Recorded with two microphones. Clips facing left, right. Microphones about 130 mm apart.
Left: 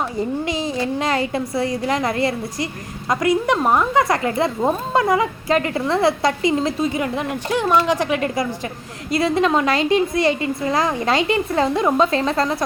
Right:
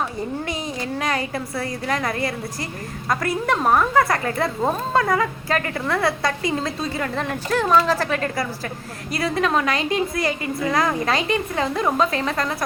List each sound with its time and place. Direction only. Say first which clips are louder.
0.4 s a woman's voice: left 5 dB; 25° left (ahead or behind)